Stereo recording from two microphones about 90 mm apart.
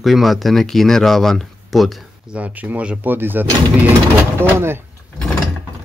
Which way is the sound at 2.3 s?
15° right (ahead or behind).